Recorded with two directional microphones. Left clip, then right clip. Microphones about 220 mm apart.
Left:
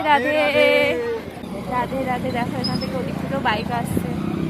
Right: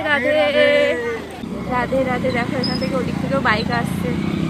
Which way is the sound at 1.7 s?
Centre (ahead or behind).